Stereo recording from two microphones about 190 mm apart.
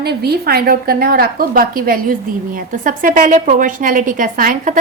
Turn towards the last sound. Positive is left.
turn(degrees=-45)  # may be behind; listen again after turning